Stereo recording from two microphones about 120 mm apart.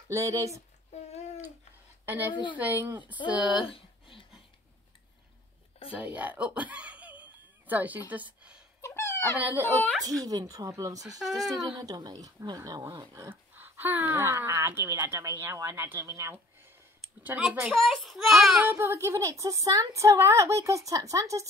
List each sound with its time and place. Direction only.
0.1 s speech: 25° right (ahead or behind)
2.0 s a woman's voice: 15° right (ahead or behind)
3.6 s a sound: 50° left (ahead or behind)
5.9 s giggle: 15° right (ahead or behind)
8.8 s a sound: 20° left (ahead or behind)
9.4 s speech: 20° right (ahead or behind)
17.2 s a woman's voice: 10° right (ahead or behind)
18.6 s speech: 20° right (ahead or behind)